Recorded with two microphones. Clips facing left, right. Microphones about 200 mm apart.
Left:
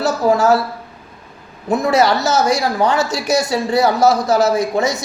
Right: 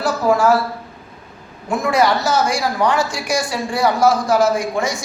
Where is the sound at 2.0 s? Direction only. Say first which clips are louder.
Right 1 dB; 25° left (ahead or behind).